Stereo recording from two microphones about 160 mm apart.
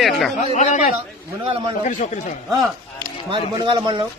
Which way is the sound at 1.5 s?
35° right (ahead or behind).